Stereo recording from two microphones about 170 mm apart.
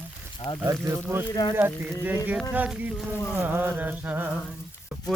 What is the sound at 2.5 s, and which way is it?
Music, 10° right (ahead or behind).